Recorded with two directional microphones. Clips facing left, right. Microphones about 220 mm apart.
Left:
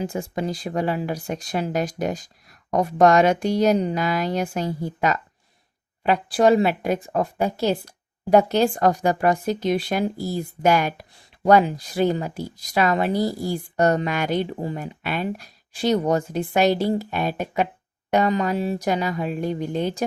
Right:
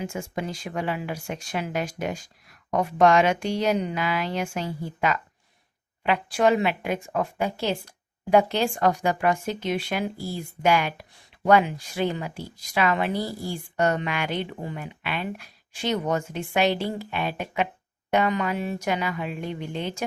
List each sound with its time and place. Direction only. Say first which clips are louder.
0.0 s speech: left 4 dB; 35° left (ahead or behind)